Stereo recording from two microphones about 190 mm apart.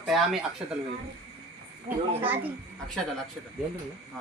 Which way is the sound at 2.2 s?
10° right (ahead or behind).